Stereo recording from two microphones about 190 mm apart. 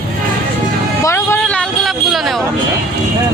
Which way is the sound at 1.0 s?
15° left (ahead or behind).